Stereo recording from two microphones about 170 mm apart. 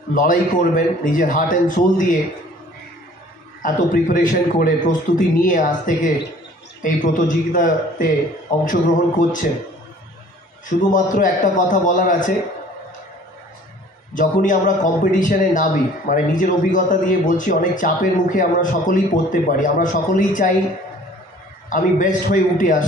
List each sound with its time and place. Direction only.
0.1 s speech: 50° left (ahead or behind)
3.6 s speech: 50° left (ahead or behind)
10.9 s speech: 50° left (ahead or behind)
14.1 s speech: 50° left (ahead or behind)
21.6 s speech: 50° left (ahead or behind)